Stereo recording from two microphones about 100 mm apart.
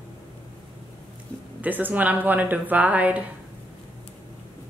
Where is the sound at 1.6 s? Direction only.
15° right (ahead or behind).